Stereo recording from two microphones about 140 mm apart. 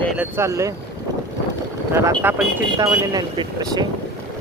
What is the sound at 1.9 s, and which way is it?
Speech, 20° right (ahead or behind).